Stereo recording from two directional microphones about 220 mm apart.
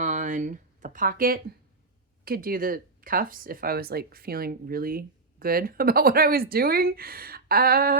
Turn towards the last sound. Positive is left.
turn(degrees=-40)  # may be behind; listen again after turning